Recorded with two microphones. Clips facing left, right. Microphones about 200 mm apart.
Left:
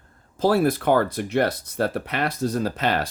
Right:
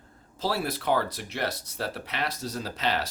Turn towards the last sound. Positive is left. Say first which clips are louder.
# left 6 dB
turn(degrees=50)  # may be behind; listen again after turning